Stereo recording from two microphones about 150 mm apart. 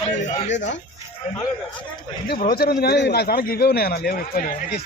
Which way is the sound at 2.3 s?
80° left.